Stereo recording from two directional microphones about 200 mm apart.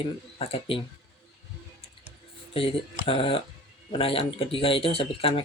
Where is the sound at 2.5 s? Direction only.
25° left (ahead or behind).